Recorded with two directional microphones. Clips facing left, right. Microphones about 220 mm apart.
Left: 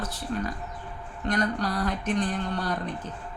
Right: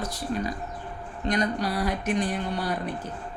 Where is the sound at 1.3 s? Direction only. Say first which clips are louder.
Right 1 dB; 10° right (ahead or behind).